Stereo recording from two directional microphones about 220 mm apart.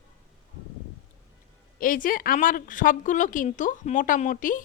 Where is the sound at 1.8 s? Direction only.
40° left (ahead or behind).